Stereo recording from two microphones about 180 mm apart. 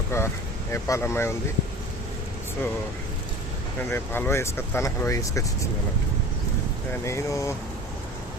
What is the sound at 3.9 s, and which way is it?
Speech, 10° left (ahead or behind).